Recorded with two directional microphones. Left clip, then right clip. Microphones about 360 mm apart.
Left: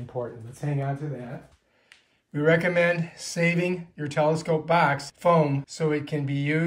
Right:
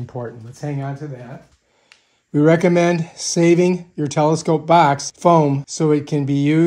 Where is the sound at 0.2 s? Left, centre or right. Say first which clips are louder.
Right 3 dB; right.